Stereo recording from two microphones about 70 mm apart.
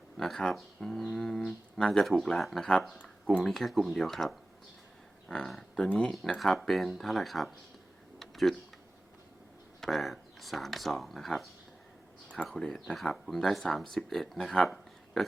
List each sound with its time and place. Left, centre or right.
0.2 s speech: centre
3.0 s a sound: left
3.4 s speech: centre
8.2 s typing: centre
9.8 s speech: centre
12.5 s speech: centre